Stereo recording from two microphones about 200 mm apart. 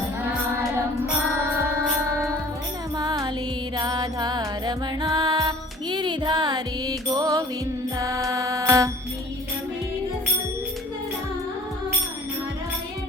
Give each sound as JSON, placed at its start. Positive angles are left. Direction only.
{"t": 3.0, "sound": "music", "side_deg": -20}